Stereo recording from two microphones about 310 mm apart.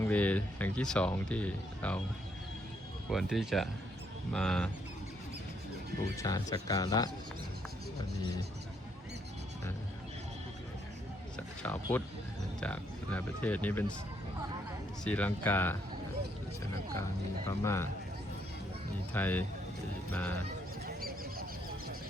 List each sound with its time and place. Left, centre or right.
0.0 s speech: centre
3.1 s speech: centre
6.1 s speech: centre
11.6 s speech: centre
15.0 s speech: centre
17.6 s speech: centre
19.1 s speech: centre
20.8 s a sound: right